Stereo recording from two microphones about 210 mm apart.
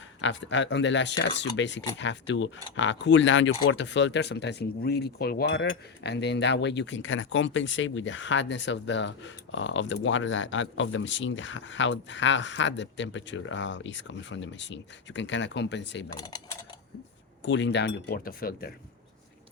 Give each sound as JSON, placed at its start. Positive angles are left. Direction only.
{"t": 0.2, "sound": "speech", "side_deg": 60}
{"t": 16.1, "sound": "speech", "side_deg": 20}
{"t": 17.4, "sound": "speech", "side_deg": 55}